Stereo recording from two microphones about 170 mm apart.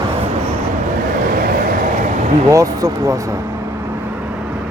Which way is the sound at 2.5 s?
20° right (ahead or behind).